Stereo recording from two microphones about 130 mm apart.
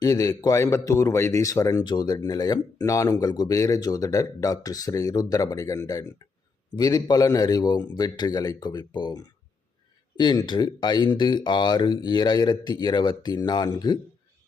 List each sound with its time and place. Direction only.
0.0 s a man's voice: 30° left (ahead or behind)